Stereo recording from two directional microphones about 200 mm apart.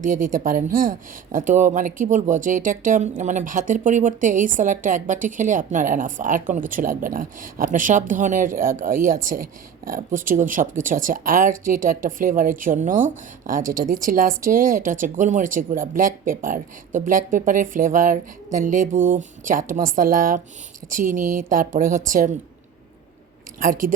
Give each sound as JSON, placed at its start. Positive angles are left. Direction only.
{"t": 0.0, "sound": "speech", "side_deg": -40}
{"t": 23.6, "sound": "speech", "side_deg": -45}